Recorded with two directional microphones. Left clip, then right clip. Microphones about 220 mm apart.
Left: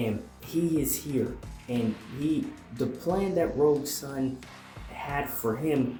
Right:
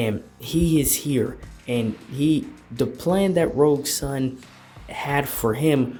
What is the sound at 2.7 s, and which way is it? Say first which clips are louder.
Speech: right 7 dB; 45° right (ahead or behind).